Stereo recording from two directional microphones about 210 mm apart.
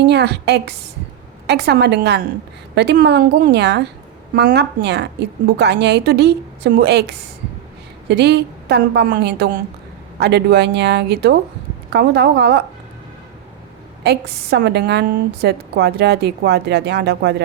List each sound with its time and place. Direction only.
0.0 s a woman's voice: 55° right (ahead or behind)
14.0 s a woman's voice: 50° right (ahead or behind)